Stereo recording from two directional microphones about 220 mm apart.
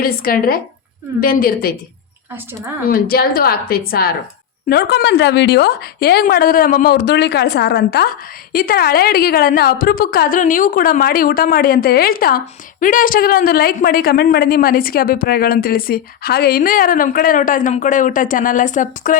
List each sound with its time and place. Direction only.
0.0 s speech: 40° left (ahead or behind)
2.8 s a woman's voice: 40° left (ahead or behind)